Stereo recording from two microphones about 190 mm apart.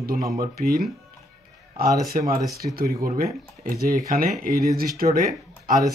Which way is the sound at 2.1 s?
50° right (ahead or behind).